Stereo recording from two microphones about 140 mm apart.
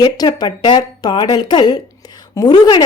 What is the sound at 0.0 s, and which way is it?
A woman's voice, 30° left (ahead or behind).